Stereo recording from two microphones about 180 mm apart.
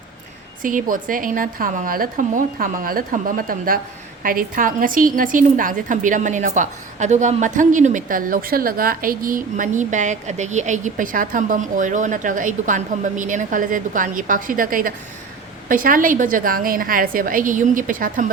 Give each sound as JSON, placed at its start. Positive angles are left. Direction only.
{"t": 0.6, "sound": "a woman's voice", "side_deg": -50}